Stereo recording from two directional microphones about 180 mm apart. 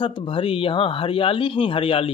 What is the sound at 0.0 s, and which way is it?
A man's voice, 30° left (ahead or behind).